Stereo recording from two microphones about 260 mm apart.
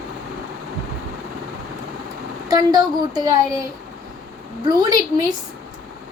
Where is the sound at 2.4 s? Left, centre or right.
Centre.